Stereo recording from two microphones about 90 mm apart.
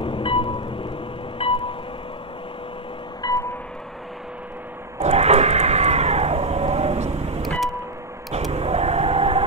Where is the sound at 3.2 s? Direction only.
50° left (ahead or behind).